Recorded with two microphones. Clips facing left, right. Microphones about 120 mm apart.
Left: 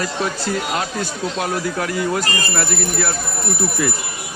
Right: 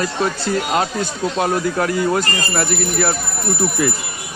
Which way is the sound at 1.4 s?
30° right (ahead or behind).